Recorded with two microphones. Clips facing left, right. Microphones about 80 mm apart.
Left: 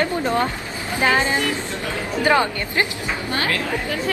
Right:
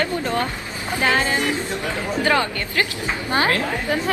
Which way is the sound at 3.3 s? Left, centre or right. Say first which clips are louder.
Right 4 dB; right.